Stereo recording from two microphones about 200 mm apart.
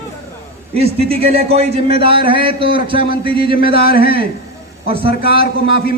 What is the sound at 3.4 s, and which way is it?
Speech, 50° left (ahead or behind).